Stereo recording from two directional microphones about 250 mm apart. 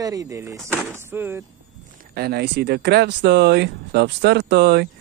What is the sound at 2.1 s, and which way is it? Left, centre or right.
Speech, right.